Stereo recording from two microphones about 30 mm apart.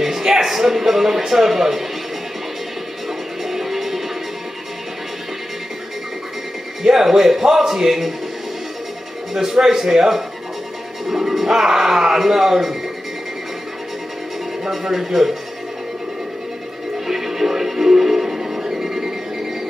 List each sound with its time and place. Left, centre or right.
0.2 s speech: centre
3.4 s music: centre
6.8 s speech: centre
9.3 s speech: centre
14.6 s speech: centre
17.1 s music: centre